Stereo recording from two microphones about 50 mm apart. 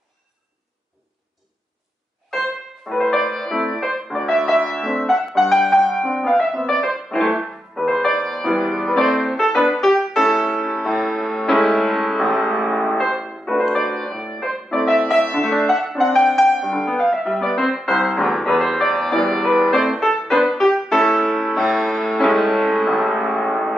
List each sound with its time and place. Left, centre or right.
2.9 s music: centre